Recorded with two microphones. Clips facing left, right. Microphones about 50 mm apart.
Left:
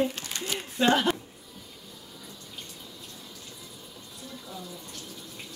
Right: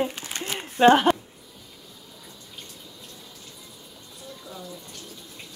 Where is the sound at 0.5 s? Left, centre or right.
Right.